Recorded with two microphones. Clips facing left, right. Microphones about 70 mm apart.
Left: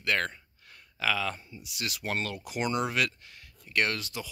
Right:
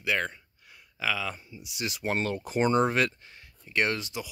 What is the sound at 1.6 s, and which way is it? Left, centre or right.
Speech, right.